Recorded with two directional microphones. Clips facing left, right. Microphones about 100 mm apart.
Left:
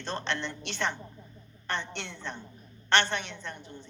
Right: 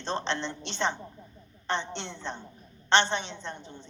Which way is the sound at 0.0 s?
25° right (ahead or behind).